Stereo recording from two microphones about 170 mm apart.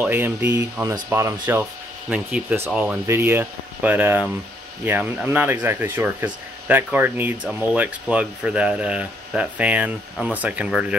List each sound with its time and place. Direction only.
0.0 s speech: 10° right (ahead or behind)